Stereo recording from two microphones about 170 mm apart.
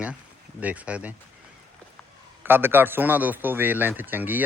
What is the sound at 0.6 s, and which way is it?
Speech, 10° right (ahead or behind).